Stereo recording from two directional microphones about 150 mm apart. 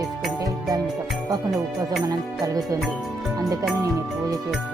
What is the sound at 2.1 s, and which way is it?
Music, 25° right (ahead or behind).